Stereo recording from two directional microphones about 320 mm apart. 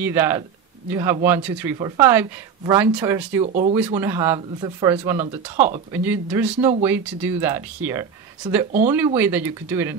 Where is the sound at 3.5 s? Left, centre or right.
Right.